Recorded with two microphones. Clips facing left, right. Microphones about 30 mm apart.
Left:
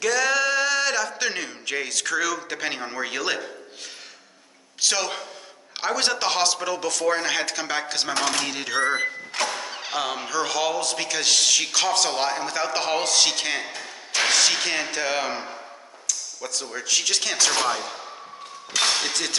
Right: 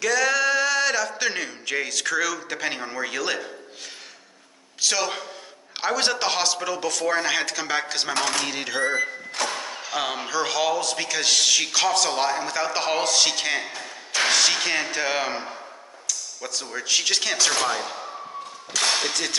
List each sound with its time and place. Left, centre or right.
0.0 s a man's voice: centre
4.8 s a man's voice: centre
8.9 s speech: left
9.7 s a sound: left
9.9 s a man's voice: centre